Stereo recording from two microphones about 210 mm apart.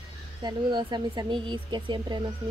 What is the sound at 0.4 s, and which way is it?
Speech, 20° right (ahead or behind).